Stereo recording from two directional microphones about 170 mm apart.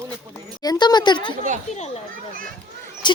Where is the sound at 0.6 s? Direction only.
25° left (ahead or behind).